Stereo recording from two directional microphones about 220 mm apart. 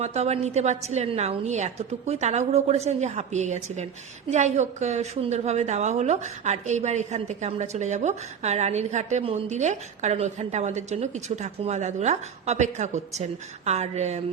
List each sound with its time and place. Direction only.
0.0 s a woman's voice: 30° right (ahead or behind)